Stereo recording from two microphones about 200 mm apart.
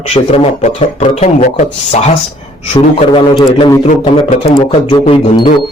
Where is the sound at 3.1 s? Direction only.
20° left (ahead or behind).